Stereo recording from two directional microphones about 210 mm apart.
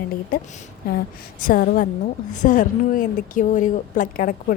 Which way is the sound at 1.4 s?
45° left (ahead or behind).